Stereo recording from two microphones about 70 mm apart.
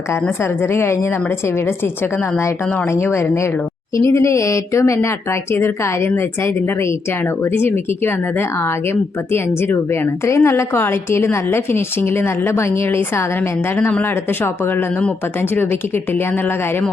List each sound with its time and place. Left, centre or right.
0.1 s speech: left